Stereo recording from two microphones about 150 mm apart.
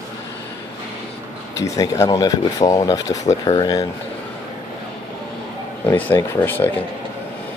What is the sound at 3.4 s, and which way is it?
Speech, 35° left (ahead or behind).